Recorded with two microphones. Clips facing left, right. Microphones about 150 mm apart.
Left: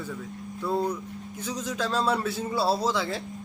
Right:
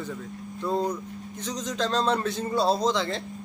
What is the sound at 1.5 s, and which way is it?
A man's voice, 10° left (ahead or behind).